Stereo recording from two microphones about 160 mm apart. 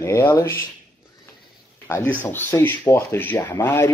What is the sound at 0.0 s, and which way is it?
Speech, 15° left (ahead or behind).